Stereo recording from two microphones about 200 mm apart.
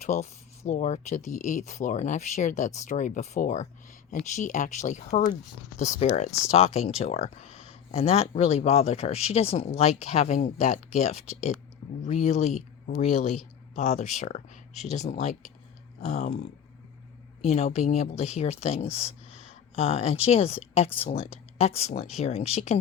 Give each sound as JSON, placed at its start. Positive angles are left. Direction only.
{"t": 0.0, "sound": "speech", "side_deg": 35}